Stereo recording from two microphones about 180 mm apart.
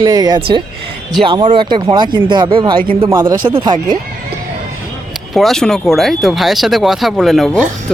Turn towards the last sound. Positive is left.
turn(degrees=0)  # may be behind; listen again after turning